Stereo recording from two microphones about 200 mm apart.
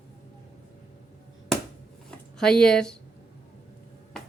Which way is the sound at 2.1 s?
5° left (ahead or behind).